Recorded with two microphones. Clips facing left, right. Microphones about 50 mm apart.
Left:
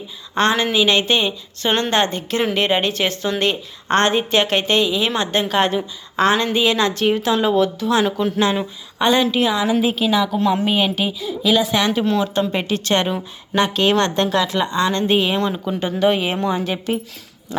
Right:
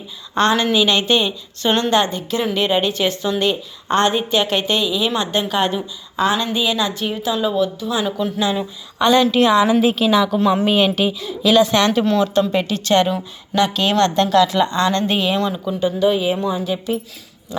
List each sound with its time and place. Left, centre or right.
0.3 s a woman's voice: left
7.2 s speech: left
8.1 s speech: left
9.0 s a woman's voice: left
9.2 s a woman's voice: centre
9.5 s a woman's voice: centre
12.3 s a woman's voice: left
15.7 s a woman's voice: left
17.5 s a woman's voice: left